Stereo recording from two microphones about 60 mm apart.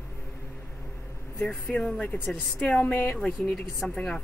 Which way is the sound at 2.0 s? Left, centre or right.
Left.